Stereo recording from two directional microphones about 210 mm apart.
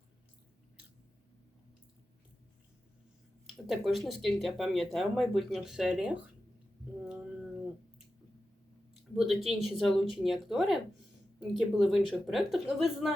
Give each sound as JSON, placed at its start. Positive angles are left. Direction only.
{"t": 3.7, "sound": "speech", "side_deg": 0}
{"t": 7.0, "sound": "cat", "side_deg": -5}
{"t": 9.0, "sound": "speech", "side_deg": 0}